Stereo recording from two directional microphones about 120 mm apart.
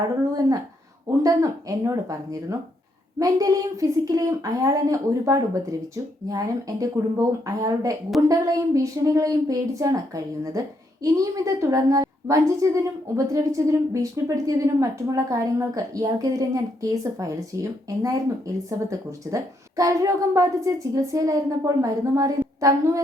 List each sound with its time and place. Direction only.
1.2 s a woman's voice: 30° right (ahead or behind)